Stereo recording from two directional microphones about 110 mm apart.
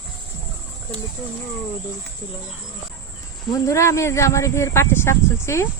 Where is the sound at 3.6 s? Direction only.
25° left (ahead or behind).